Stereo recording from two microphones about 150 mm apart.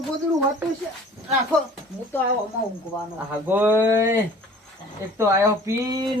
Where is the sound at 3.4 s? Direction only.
10° right (ahead or behind).